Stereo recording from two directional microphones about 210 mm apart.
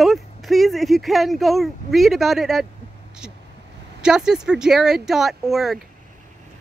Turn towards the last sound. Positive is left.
turn(degrees=0)  # may be behind; listen again after turning